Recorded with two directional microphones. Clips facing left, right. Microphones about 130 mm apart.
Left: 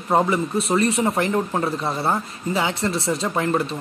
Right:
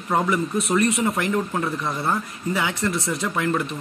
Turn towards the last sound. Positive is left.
turn(degrees=30)  # may be behind; listen again after turning